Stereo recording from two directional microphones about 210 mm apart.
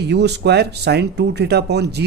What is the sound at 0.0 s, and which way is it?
Speech, 55° right (ahead or behind).